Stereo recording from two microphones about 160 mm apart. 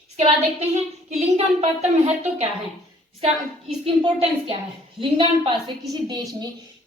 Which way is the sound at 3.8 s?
35° right (ahead or behind).